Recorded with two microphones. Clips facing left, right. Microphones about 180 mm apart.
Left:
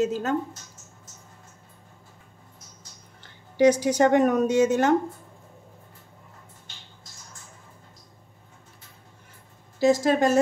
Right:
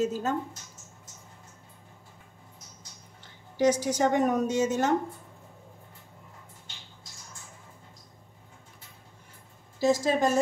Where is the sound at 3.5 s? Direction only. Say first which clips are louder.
Left 5 dB; 65° left (ahead or behind).